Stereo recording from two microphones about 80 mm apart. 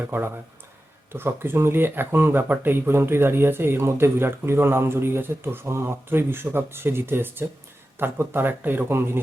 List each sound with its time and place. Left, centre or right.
0.1 s speech: right